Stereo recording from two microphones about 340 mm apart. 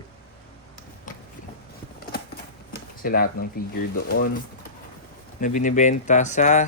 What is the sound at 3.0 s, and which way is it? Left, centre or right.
Speech, left.